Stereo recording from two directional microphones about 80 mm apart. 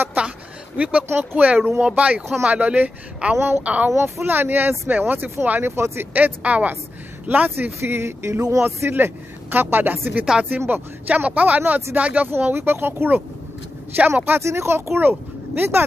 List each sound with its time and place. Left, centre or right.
0.0 s a sound: centre
0.7 s speech: centre
1.0 s speech: right
3.9 s speech: right
14.4 s speech: right